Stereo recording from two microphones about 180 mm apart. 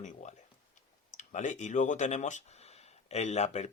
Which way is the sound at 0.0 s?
40° left (ahead or behind).